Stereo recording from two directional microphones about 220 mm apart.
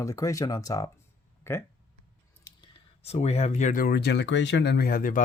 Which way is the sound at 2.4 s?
25° left (ahead or behind).